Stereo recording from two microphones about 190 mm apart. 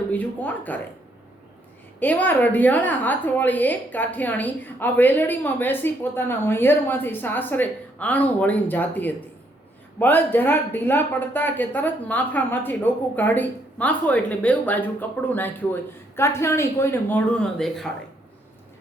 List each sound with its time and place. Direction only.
0.1 s a woman's voice: 10° left (ahead or behind)
2.0 s a woman's voice: 10° left (ahead or behind)